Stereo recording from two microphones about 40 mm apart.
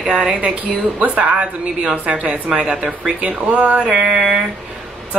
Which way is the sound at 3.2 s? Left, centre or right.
Right.